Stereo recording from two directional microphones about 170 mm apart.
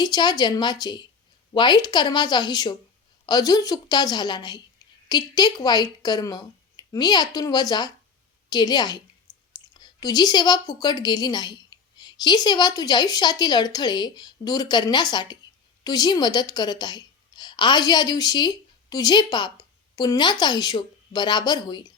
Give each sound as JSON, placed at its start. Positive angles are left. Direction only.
{"t": 0.0, "sound": "a woman's voice", "side_deg": 25}